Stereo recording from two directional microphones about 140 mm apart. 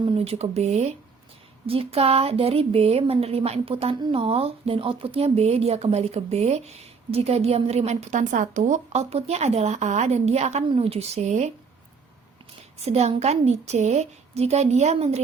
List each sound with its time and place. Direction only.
0.0 s a woman's voice: 45° right (ahead or behind)
1.6 s a woman's voice: 40° right (ahead or behind)
12.8 s a woman's voice: 50° right (ahead or behind)